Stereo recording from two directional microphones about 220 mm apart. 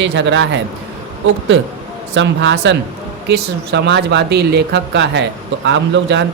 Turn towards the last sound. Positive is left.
turn(degrees=-55)  # may be behind; listen again after turning